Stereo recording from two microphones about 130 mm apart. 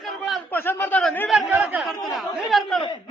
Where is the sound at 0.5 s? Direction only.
15° left (ahead or behind).